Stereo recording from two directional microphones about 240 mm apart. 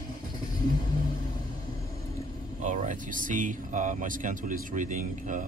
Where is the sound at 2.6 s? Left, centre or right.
Right.